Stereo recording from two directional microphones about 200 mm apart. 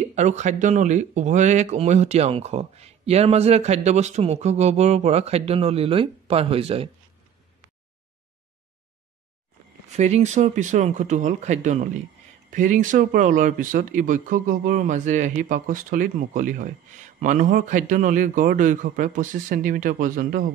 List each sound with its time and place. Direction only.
0.1 s speech: 35° right (ahead or behind)
9.8 s speech: 35° right (ahead or behind)